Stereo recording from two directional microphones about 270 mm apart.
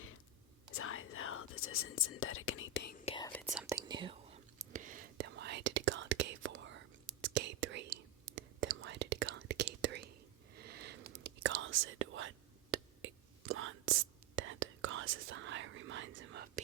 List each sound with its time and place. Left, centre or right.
0.8 s whispering: left
3.1 s whispering: centre
3.4 s whispering: centre; by 16.5 s right